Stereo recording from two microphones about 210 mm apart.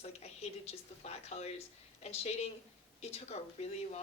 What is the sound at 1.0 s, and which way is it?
A woman's voice, 30° left (ahead or behind).